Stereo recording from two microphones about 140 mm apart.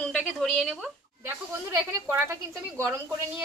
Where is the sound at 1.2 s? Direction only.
15° right (ahead or behind).